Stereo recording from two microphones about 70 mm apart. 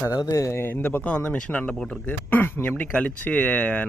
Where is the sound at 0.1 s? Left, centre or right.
Left.